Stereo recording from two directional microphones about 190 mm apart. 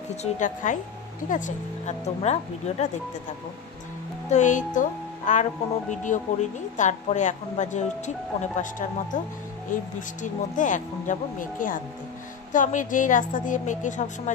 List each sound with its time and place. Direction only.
0.1 s speech: 40° left (ahead or behind)
4.3 s speech: 40° left (ahead or behind)
10.2 s a woman's voice: 40° left (ahead or behind)